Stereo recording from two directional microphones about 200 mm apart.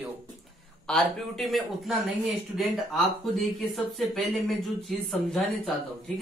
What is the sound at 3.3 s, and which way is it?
Speech, centre (ahead or behind).